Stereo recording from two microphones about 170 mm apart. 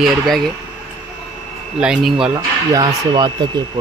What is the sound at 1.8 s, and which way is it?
Speech, 5° right (ahead or behind).